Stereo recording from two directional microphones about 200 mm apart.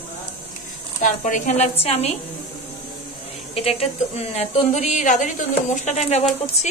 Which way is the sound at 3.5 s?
30° left (ahead or behind).